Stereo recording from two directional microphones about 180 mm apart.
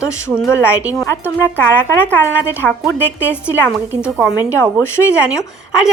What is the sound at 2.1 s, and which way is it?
Speech, 10° left (ahead or behind).